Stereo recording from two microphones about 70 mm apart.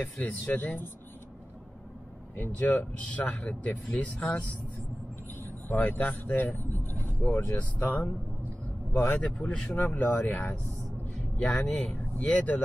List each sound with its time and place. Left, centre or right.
0.0 s speech: left
2.3 s speech: left
9.2 s speech: centre